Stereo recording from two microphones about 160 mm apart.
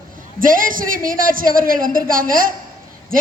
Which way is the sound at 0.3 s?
60° right (ahead or behind).